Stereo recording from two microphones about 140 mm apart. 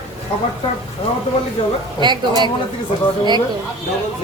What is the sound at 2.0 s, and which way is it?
Speech, 30° right (ahead or behind).